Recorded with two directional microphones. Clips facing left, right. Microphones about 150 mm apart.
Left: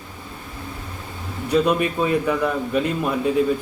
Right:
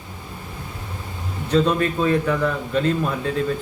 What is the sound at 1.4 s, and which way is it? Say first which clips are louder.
A man's voice: even; 10° left (ahead or behind).